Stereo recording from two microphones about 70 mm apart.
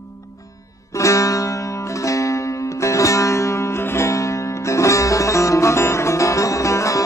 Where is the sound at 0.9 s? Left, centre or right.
Left.